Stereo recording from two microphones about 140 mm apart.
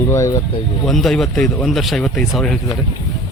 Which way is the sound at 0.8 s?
Centre (ahead or behind).